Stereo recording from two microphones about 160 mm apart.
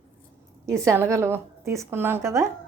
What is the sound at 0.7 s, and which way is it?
A woman's voice, 20° right (ahead or behind).